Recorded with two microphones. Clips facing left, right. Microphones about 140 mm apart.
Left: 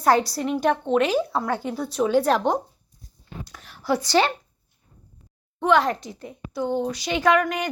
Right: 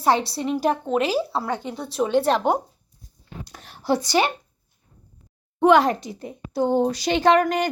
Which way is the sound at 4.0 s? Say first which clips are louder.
Left 4 dB; 15° right (ahead or behind).